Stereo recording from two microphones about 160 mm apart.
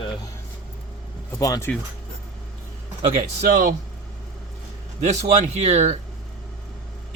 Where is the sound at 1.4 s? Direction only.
20° left (ahead or behind).